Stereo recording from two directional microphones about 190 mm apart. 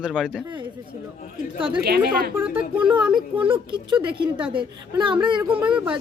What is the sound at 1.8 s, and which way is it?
Speech, 55° right (ahead or behind).